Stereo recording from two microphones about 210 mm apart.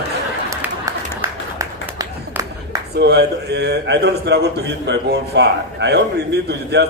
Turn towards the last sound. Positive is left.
turn(degrees=-55)  # may be behind; listen again after turning